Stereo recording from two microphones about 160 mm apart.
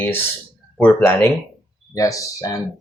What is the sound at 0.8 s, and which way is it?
Speech, 10° left (ahead or behind).